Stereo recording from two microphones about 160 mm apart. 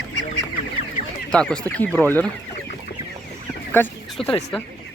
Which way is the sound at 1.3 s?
5° left (ahead or behind).